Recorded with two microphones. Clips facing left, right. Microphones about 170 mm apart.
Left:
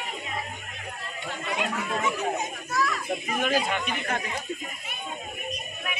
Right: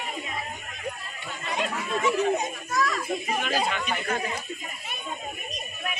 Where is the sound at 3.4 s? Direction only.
50° left (ahead or behind).